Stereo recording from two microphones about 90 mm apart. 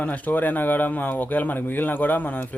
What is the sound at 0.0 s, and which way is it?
Speech, 20° left (ahead or behind).